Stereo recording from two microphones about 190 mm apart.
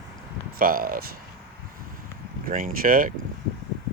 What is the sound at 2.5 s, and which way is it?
Speech, 45° right (ahead or behind).